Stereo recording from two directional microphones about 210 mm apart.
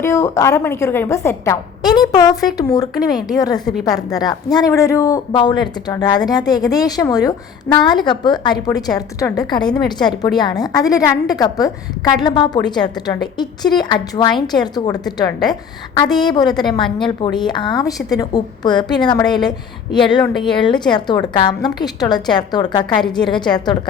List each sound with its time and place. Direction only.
0.0 s a woman's voice: 15° left (ahead or behind)